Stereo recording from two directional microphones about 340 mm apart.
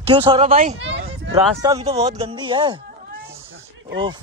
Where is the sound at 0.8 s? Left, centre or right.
Right.